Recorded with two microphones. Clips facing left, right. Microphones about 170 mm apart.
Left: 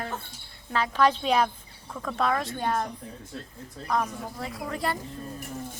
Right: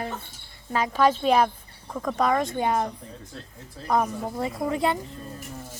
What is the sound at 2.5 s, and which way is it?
Speech, 15° right (ahead or behind).